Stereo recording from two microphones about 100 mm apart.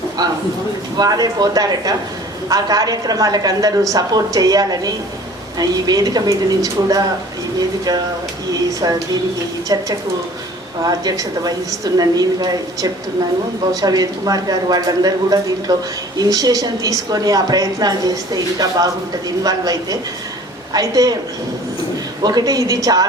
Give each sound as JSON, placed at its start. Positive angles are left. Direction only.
{"t": 0.2, "sound": "a sound", "side_deg": -40}
{"t": 0.9, "sound": "a woman's voice", "side_deg": -40}
{"t": 10.8, "sound": "a woman's voice", "side_deg": -40}
{"t": 22.2, "sound": "a woman's voice", "side_deg": -40}